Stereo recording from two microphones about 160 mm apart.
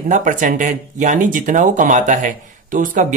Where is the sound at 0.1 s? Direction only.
55° right (ahead or behind).